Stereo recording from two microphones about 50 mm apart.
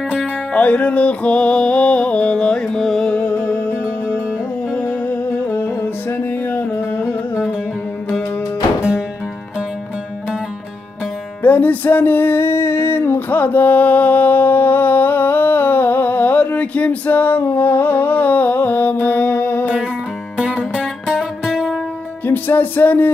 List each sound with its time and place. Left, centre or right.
0.5 s music: left; by 3.1 s centre
3.1 s music: left
4.8 s music: left
6.8 s music: left
11.4 s a sound: left
20.4 s music: centre
21.2 s music: centre
22.2 s music: left